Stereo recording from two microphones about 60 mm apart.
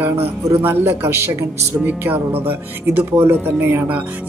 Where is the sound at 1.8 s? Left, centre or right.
Right.